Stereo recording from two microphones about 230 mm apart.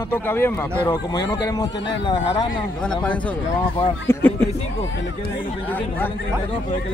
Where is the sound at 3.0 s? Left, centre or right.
Centre.